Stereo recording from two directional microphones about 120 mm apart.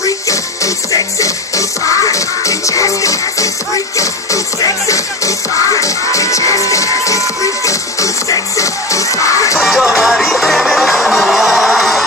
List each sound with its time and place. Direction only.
1.9 s music: 25° left (ahead or behind)
9.6 s music: 5° right (ahead or behind)